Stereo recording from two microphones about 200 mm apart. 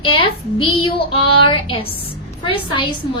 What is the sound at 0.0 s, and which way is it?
A woman's voice, 25° left (ahead or behind).